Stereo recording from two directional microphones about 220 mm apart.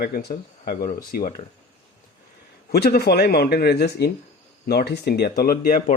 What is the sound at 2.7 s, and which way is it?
Speech, 45° left (ahead or behind).